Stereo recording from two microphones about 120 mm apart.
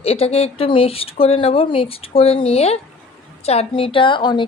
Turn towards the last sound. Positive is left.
turn(degrees=40)  # may be behind; listen again after turning